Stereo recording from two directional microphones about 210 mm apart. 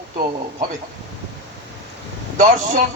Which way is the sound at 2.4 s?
35° right (ahead or behind).